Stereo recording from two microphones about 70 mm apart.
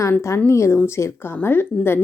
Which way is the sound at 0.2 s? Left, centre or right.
Left.